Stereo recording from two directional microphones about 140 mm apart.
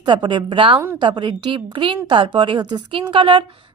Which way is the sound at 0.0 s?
35° right (ahead or behind).